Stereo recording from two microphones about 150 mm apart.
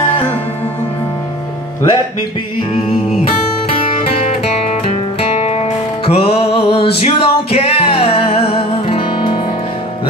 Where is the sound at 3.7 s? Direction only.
45° left (ahead or behind).